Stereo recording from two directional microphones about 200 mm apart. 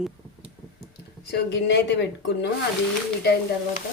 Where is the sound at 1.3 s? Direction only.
60° left (ahead or behind).